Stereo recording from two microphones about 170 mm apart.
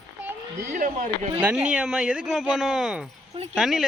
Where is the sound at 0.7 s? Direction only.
50° right (ahead or behind).